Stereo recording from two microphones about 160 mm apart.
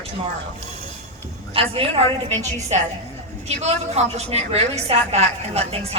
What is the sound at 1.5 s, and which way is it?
Speech, 35° right (ahead or behind).